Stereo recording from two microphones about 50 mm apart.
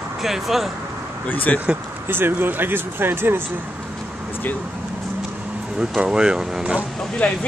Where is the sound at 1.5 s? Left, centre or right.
Centre.